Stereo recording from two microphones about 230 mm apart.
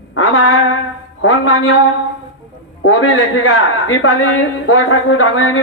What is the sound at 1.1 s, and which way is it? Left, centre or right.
A woman's voice, left.